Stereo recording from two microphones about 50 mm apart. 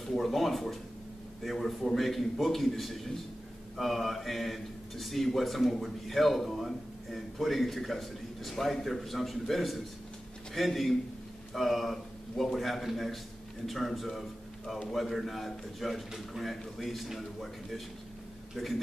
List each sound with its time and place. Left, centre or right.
0.0 s a man's voice: centre